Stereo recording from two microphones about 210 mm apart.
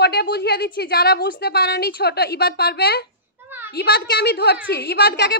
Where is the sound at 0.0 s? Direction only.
50° left (ahead or behind).